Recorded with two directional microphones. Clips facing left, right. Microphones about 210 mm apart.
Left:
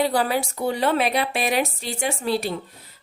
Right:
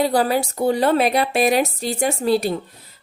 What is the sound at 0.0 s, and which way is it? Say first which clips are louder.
Speech: right 3 dB; 40° right (ahead or behind).